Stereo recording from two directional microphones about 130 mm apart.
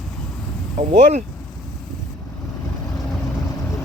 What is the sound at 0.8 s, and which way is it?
Speech, 60° right (ahead or behind).